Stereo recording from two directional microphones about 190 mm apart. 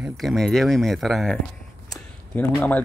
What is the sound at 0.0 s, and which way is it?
Speech, centre (ahead or behind).